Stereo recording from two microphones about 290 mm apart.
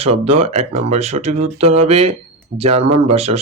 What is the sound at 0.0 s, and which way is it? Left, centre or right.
Speech, right.